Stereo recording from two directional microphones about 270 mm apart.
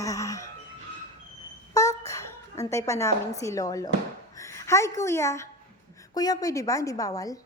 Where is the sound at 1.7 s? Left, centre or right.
Centre.